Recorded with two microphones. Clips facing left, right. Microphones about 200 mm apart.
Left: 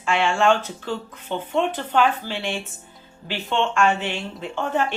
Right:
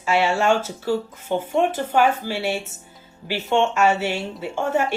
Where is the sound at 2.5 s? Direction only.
45° right (ahead or behind).